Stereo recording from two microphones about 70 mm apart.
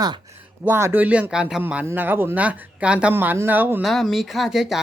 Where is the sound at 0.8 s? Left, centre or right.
Right.